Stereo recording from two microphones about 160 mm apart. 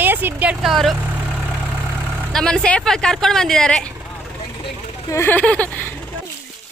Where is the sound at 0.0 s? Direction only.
10° right (ahead or behind).